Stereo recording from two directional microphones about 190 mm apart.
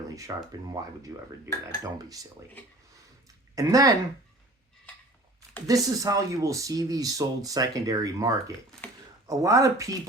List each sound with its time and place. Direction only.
0.1 s speech: 20° right (ahead or behind)
3.5 s speech: 20° right (ahead or behind)
5.6 s speech: 20° right (ahead or behind)